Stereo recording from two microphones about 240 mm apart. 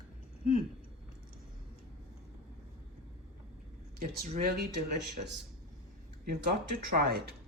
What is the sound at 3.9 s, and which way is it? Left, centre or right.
Speech, right.